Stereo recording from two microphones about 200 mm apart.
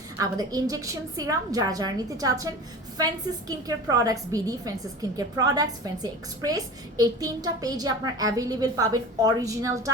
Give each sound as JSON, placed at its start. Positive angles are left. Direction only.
{"t": 0.2, "sound": "a woman's voice", "side_deg": -20}
{"t": 3.5, "sound": "a woman's voice", "side_deg": -20}